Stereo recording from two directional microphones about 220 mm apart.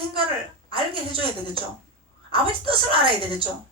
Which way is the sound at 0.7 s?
25° right (ahead or behind).